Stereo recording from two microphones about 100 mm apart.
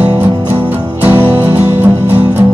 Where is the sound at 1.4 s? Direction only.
20° right (ahead or behind).